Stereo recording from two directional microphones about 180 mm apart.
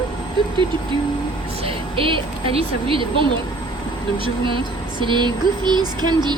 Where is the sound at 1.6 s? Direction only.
30° right (ahead or behind).